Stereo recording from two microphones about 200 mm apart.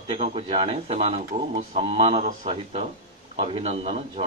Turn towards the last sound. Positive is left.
turn(degrees=-30)  # may be behind; listen again after turning